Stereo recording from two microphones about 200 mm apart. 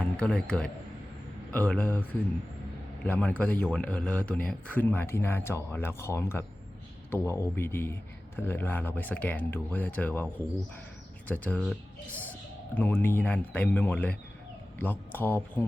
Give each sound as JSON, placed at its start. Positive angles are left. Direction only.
{"t": 0.0, "sound": "speech", "side_deg": 5}